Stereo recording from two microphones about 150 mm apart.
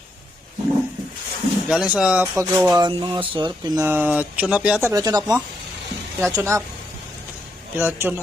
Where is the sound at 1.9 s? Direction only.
5° right (ahead or behind).